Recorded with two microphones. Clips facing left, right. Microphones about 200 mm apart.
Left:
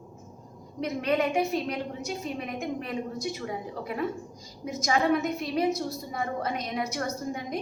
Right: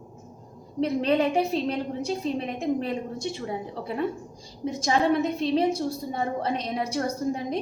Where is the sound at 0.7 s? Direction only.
30° right (ahead or behind).